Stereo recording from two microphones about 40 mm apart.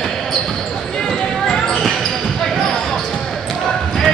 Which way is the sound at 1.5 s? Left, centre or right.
Centre.